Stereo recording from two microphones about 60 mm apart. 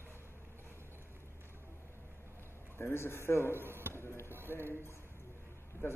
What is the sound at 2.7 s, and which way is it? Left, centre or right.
Speech, left.